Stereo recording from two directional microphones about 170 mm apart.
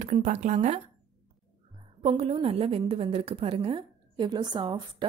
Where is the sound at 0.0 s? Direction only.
45° right (ahead or behind).